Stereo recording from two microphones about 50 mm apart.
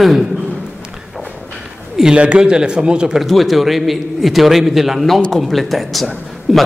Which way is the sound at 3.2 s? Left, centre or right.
Centre.